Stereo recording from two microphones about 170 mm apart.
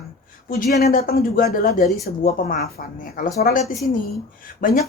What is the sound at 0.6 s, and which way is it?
A woman's voice, 65° left (ahead or behind).